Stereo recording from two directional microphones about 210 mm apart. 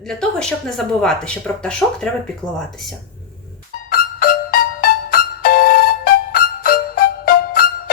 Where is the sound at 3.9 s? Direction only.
45° left (ahead or behind).